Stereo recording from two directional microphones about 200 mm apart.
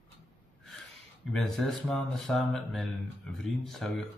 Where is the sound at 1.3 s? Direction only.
Centre (ahead or behind).